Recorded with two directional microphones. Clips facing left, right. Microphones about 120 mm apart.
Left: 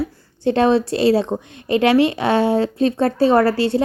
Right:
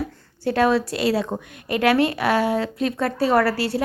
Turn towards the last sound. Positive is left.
turn(degrees=25)  # may be behind; listen again after turning